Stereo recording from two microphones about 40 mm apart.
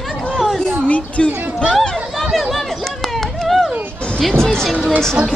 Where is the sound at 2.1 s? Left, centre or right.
Centre.